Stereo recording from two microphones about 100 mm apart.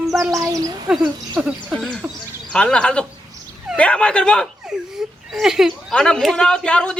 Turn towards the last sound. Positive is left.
turn(degrees=10)  # may be behind; listen again after turning